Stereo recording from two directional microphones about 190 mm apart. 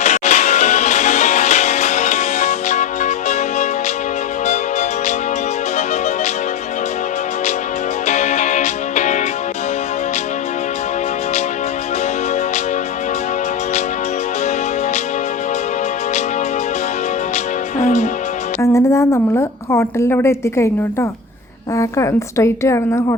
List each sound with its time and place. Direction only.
0.0 s music: 40° left (ahead or behind)
8.0 s music: 35° left (ahead or behind)
17.3 s music: 40° left (ahead or behind)
18.6 s a woman's voice: 15° left (ahead or behind)